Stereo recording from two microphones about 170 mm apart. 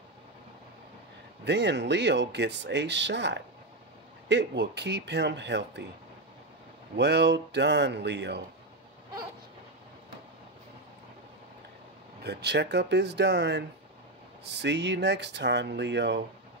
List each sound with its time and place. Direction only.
1.4 s speech: 90° right
7.0 s speech: 80° right
12.2 s speech: 75° right (ahead or behind); by 16.2 s 90° right